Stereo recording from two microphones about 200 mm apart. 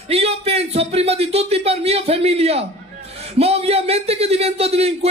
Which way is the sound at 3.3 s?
30° right (ahead or behind).